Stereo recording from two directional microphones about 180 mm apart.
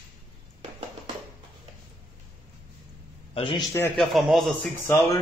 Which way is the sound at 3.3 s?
25° left (ahead or behind).